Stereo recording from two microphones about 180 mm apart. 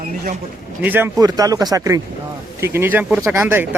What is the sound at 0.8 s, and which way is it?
Speech, 10° right (ahead or behind).